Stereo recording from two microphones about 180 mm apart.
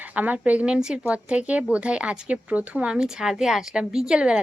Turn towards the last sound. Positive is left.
turn(degrees=-5)  # may be behind; listen again after turning